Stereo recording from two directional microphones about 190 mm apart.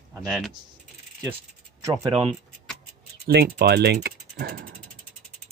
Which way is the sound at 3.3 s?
55° right (ahead or behind).